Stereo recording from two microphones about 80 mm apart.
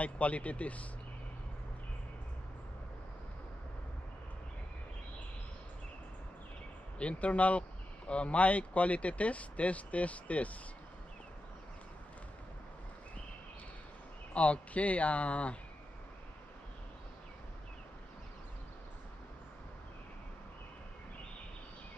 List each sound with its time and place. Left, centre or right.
0.0 s speech: centre
7.0 s speech: centre
14.3 s speech: centre